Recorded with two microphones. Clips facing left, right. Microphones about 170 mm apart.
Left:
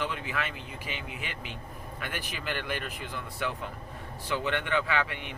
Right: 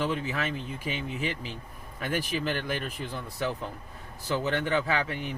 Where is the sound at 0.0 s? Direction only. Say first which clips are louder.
Right 4 dB; 40° right (ahead or behind).